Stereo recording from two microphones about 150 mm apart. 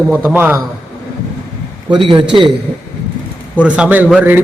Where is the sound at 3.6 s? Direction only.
5° right (ahead or behind).